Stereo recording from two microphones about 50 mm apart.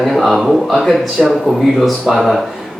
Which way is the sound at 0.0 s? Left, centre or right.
Centre.